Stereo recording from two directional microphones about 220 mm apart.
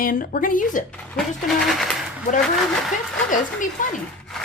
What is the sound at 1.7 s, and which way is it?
Speech, centre (ahead or behind).